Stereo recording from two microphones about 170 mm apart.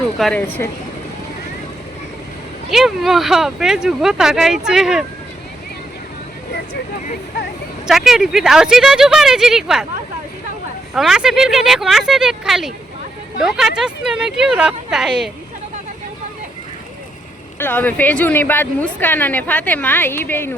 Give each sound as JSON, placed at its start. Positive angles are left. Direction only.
{"t": 0.2, "sound": "speech", "side_deg": 5}
{"t": 2.6, "sound": "speech", "side_deg": 0}
{"t": 7.9, "sound": "speech", "side_deg": 0}
{"t": 10.9, "sound": "speech", "side_deg": 0}
{"t": 17.6, "sound": "speech", "side_deg": 10}